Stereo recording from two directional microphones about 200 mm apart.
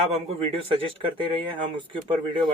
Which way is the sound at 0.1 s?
30° right (ahead or behind).